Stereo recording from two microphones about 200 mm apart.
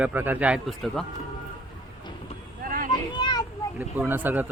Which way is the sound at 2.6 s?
45° right (ahead or behind).